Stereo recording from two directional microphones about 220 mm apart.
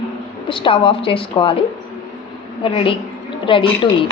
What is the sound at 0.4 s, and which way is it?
A woman's voice, 25° left (ahead or behind).